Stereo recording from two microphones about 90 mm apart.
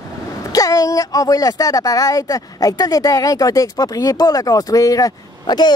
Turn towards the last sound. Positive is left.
turn(degrees=50)  # may be behind; listen again after turning